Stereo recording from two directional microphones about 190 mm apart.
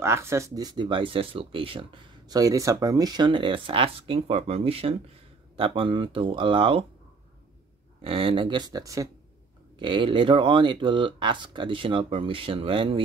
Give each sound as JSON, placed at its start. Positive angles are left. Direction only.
{"t": 0.0, "sound": "speech", "side_deg": -15}
{"t": 8.0, "sound": "speech", "side_deg": -30}